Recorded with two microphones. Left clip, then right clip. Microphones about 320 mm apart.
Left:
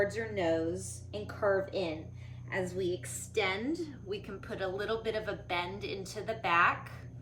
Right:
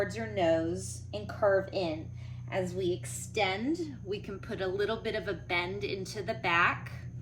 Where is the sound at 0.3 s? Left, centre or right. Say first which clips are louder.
Right 4 dB; centre.